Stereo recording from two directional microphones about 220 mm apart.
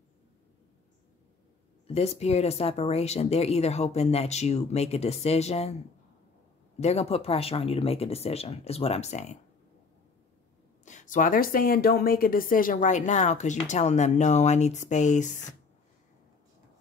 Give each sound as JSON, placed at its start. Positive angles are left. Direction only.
{"t": 1.9, "sound": "speech", "side_deg": 30}
{"t": 6.8, "sound": "speech", "side_deg": 30}
{"t": 10.9, "sound": "speech", "side_deg": 35}